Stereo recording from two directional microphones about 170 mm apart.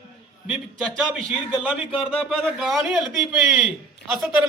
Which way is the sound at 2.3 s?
Centre (ahead or behind).